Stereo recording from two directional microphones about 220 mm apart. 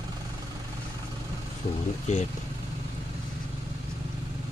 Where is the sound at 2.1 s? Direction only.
30° left (ahead or behind).